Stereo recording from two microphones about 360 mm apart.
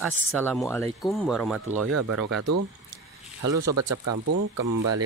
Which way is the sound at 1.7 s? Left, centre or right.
Right.